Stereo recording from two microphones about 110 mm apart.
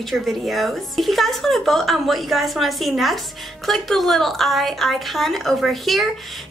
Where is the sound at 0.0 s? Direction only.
Centre (ahead or behind).